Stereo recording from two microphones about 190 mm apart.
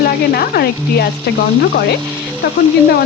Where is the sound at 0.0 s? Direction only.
55° left (ahead or behind).